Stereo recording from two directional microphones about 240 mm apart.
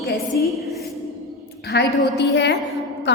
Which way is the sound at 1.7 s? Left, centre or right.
Left.